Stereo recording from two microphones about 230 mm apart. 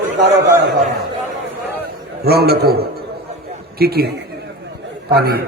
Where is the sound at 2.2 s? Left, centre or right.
Right.